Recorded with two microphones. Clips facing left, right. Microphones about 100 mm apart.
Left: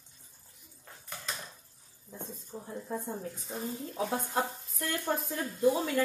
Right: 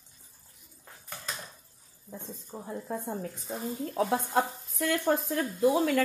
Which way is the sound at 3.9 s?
70° right (ahead or behind).